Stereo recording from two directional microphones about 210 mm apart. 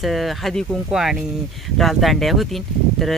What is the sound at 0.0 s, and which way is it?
Speech, centre (ahead or behind).